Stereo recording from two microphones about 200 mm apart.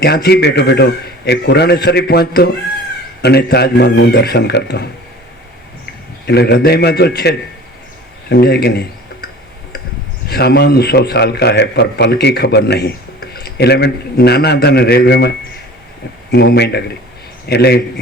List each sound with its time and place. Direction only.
0.0 s a man's voice: 55° left (ahead or behind)
6.2 s a man's voice: 55° left (ahead or behind)
10.2 s a man's voice: 55° left (ahead or behind)
16.3 s a man's voice: 55° left (ahead or behind)